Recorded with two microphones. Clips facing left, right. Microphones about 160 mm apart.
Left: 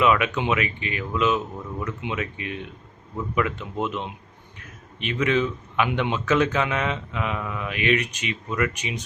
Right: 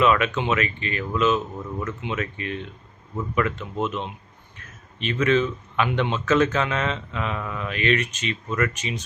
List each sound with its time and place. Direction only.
0.0 s speech: 15° left (ahead or behind)